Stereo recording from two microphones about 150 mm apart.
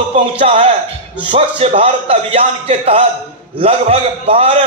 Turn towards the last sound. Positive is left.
turn(degrees=-40)  # may be behind; listen again after turning